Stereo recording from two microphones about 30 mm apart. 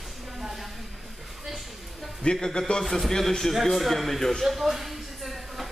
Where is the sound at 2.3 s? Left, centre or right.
Centre.